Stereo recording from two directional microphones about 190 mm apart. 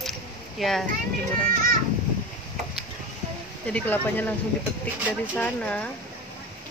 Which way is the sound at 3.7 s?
10° left (ahead or behind).